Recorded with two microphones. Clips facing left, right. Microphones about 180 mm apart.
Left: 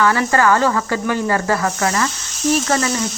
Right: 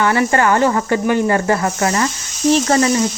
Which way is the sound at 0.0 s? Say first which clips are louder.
Right 1 dB; 20° right (ahead or behind).